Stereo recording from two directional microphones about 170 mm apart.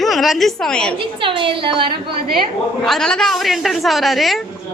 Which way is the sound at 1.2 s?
30° right (ahead or behind).